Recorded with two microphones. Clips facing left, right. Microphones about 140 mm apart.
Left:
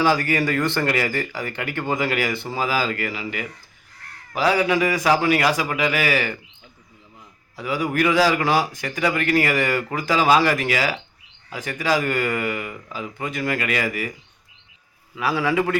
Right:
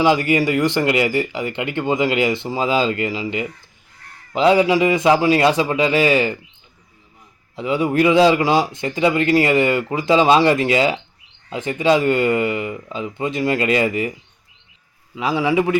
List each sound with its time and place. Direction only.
0.0 s speech: 20° right (ahead or behind)
7.5 s speech: 25° right (ahead or behind)
15.1 s a man's voice: 20° right (ahead or behind)